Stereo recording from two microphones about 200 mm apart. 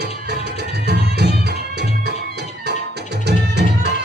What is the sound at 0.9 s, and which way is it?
Music, 55° right (ahead or behind).